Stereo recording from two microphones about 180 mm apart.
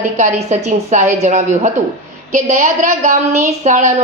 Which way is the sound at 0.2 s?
45° right (ahead or behind).